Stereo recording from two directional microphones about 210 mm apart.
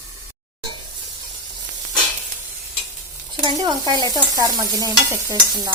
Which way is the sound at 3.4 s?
20° right (ahead or behind).